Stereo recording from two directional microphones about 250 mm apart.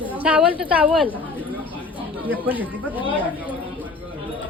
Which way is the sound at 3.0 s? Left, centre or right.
Left.